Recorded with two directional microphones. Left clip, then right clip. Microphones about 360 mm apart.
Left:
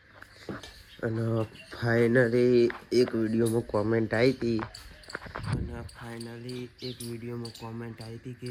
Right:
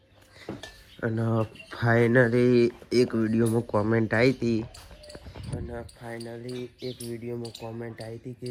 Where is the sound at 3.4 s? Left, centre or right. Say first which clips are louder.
Right 1 dB; right.